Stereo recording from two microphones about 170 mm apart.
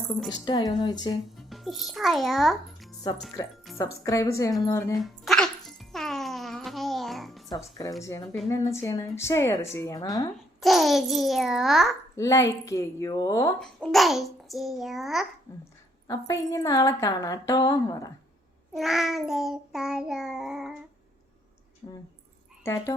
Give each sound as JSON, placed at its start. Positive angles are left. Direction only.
{"t": 0.3, "sound": "a woman's voice", "side_deg": 20}
{"t": 1.4, "sound": "a child's voice", "side_deg": 0}
{"t": 3.8, "sound": "a woman's voice", "side_deg": 20}
{"t": 4.9, "sound": "music", "side_deg": 0}
{"t": 8.0, "sound": "a woman's voice", "side_deg": 15}
{"t": 10.6, "sound": "child singing", "side_deg": 0}
{"t": 12.1, "sound": "a woman's voice", "side_deg": 20}
{"t": 13.6, "sound": "child singing", "side_deg": 0}
{"t": 16.0, "sound": "a woman's voice", "side_deg": 20}
{"t": 18.7, "sound": "child singing", "side_deg": 0}
{"t": 21.8, "sound": "a woman's voice", "side_deg": 25}